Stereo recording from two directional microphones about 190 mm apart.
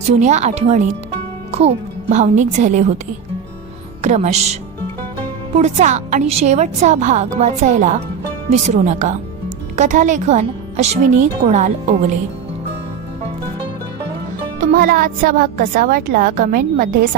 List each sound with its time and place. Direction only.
0.1 s a woman's voice: 40° right (ahead or behind)
4.0 s a woman's voice: 35° right (ahead or behind)
5.5 s a woman's voice: 40° right (ahead or behind)
14.6 s a woman's voice: 45° right (ahead or behind)